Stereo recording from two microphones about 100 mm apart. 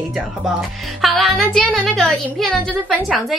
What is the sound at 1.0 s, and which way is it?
Speech, centre (ahead or behind).